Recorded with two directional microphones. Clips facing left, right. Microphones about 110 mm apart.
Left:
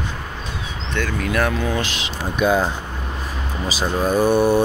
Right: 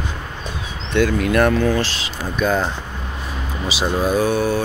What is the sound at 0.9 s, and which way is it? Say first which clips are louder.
Speech: right 7 dB; 15° right (ahead or behind).